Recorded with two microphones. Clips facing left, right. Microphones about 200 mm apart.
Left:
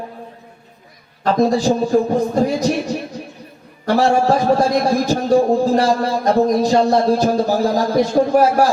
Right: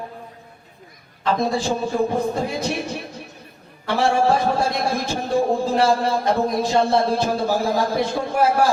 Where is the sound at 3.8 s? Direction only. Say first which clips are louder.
Left 4 dB; 40° left (ahead or behind).